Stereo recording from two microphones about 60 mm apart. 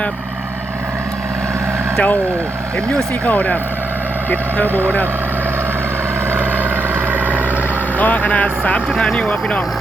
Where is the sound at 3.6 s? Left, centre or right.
Right.